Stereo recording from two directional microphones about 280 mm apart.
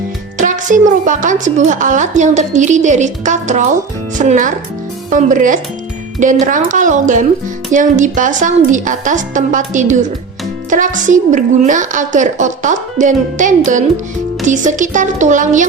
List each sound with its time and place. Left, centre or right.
0.3 s a woman's voice: right